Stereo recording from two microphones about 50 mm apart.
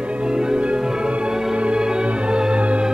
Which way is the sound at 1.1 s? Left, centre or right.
Centre.